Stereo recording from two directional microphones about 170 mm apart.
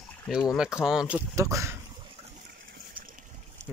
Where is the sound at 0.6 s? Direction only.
5° right (ahead or behind).